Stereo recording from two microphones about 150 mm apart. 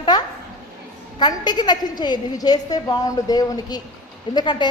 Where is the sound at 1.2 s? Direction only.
30° left (ahead or behind).